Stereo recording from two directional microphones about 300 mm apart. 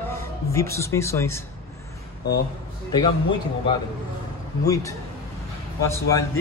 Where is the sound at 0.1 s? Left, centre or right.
Centre.